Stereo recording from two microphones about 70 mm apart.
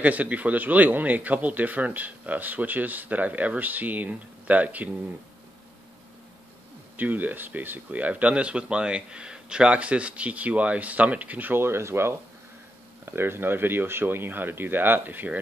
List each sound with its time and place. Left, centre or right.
0.0 s speech: right
7.0 s speech: right